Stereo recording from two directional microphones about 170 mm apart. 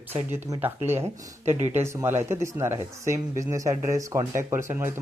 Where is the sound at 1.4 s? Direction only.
40° right (ahead or behind).